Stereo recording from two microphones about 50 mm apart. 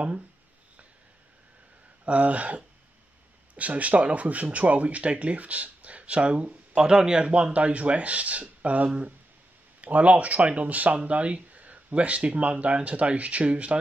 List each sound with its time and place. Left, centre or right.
2.0 s speech: right